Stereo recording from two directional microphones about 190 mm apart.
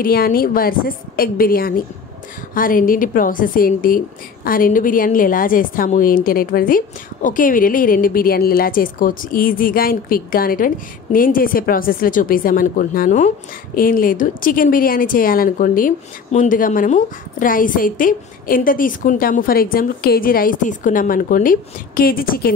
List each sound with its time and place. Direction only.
0.0 s a woman's voice: 50° left (ahead or behind)